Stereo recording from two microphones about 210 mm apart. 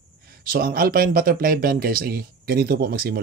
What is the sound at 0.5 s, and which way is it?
Speech, 45° right (ahead or behind).